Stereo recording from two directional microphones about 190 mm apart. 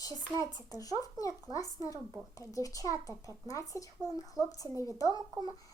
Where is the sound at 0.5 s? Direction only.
20° left (ahead or behind).